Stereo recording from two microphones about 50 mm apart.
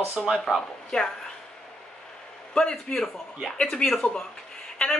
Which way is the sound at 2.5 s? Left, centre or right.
Centre.